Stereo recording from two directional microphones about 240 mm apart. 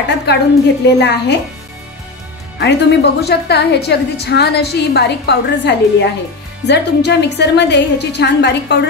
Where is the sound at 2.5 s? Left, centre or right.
Left.